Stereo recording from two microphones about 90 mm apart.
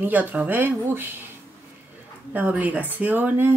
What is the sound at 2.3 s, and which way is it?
A woman's voice, 15° right (ahead or behind).